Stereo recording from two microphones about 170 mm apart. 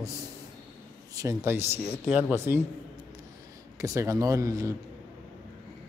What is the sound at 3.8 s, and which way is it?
Speech, 20° right (ahead or behind).